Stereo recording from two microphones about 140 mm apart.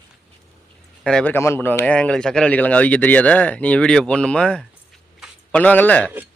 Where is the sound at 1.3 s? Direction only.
15° left (ahead or behind).